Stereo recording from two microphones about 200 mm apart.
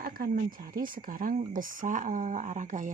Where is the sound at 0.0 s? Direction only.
45° right (ahead or behind).